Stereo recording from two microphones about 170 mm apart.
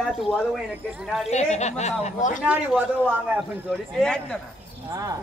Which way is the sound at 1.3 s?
40° left (ahead or behind).